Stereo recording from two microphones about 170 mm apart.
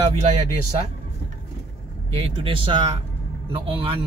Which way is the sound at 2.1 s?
35° right (ahead or behind).